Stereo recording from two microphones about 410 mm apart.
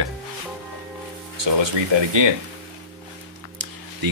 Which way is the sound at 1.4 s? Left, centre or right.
Right.